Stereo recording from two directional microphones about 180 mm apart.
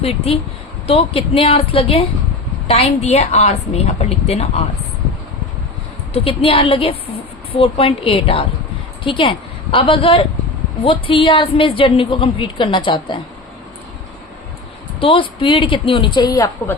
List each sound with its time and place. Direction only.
0.0 s a woman's voice: 35° left (ahead or behind)
6.1 s a woman's voice: 30° left (ahead or behind)
15.0 s a woman's voice: 30° left (ahead or behind)